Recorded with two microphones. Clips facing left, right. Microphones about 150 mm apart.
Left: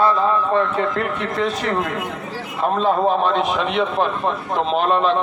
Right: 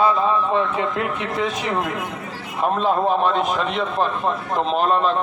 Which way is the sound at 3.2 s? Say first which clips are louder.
Left 1 dB; centre (ahead or behind).